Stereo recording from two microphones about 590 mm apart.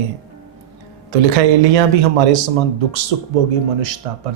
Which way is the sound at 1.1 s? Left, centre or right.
Right.